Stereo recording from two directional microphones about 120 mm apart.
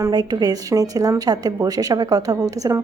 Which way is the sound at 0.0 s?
30° right (ahead or behind).